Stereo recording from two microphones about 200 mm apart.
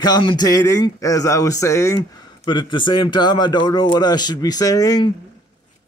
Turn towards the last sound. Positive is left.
turn(degrees=20)  # may be behind; listen again after turning